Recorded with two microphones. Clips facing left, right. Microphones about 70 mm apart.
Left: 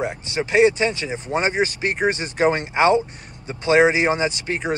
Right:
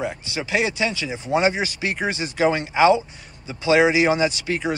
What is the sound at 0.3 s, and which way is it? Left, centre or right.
Speech, left.